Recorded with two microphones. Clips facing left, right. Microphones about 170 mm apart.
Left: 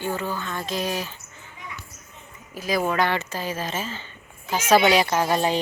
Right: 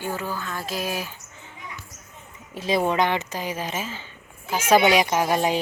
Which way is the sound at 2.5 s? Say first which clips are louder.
Right 2 dB; 25° right (ahead or behind).